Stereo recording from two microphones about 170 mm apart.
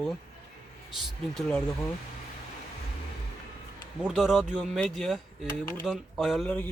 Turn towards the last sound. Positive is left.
turn(degrees=5)  # may be behind; listen again after turning